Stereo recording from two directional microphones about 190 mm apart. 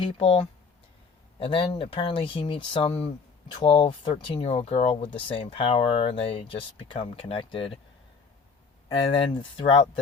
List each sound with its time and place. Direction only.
0.0 s speech: 30° left (ahead or behind)
8.9 s speech: 25° left (ahead or behind)